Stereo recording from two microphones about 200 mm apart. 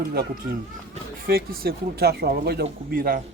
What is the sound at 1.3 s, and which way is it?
Speech, 50° right (ahead or behind).